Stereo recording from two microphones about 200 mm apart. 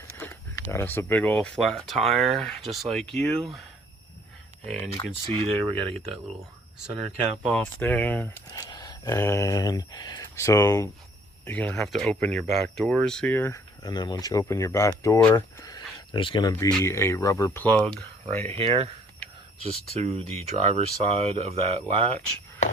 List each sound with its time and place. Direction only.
0.2 s speech: 10° left (ahead or behind)
4.6 s speech: 5° left (ahead or behind)
7.4 s speech: 5° left (ahead or behind)
18.5 s speech: 30° right (ahead or behind)